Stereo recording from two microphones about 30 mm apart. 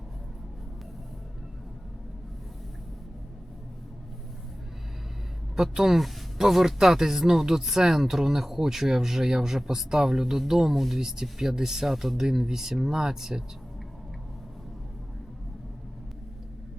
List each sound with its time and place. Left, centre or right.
5.7 s speech: centre